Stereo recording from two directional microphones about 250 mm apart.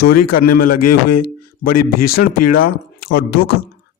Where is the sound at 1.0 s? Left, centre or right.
Left.